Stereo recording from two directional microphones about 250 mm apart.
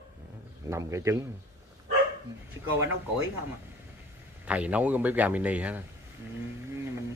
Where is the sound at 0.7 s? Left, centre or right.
Centre.